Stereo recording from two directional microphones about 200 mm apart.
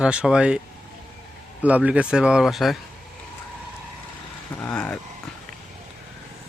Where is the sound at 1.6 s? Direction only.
5° right (ahead or behind).